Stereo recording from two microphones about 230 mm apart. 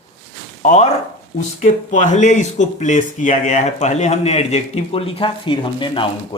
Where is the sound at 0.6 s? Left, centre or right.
Left.